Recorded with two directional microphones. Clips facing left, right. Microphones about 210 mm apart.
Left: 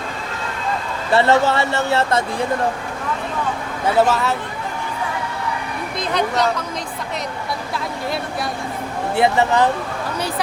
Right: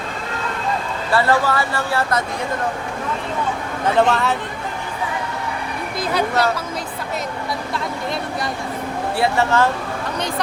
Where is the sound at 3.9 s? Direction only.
5° left (ahead or behind).